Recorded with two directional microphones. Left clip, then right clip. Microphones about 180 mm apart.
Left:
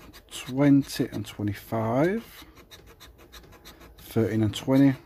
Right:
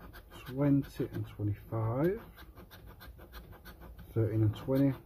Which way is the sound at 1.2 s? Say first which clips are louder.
Left 9 dB; 55° left (ahead or behind).